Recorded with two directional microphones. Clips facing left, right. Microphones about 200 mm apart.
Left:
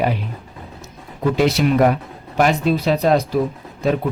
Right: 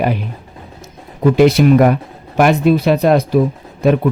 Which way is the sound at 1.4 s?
55° right (ahead or behind).